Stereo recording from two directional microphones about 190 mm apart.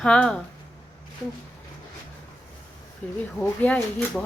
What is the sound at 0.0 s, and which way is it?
Speech, 5° left (ahead or behind).